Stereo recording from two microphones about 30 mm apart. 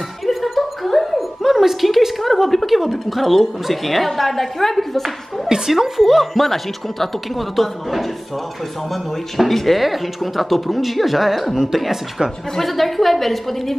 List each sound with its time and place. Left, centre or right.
0.3 s music: centre
1.4 s a woman's voice: centre
9.5 s a woman's voice: centre
11.5 s speech: centre
12.5 s a woman's voice: centre